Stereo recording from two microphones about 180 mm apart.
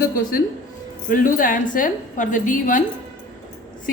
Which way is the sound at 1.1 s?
50° left (ahead or behind).